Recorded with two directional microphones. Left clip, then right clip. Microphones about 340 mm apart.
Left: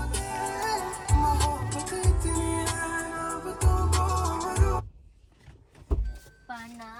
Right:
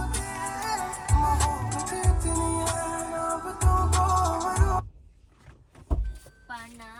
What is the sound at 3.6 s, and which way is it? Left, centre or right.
Music, centre.